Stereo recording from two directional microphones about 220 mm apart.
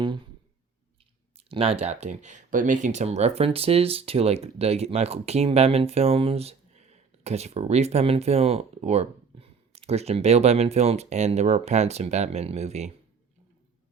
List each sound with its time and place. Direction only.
1.4 s speech: 25° right (ahead or behind)